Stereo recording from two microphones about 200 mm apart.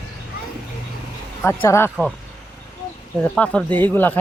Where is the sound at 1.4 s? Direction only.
10° left (ahead or behind).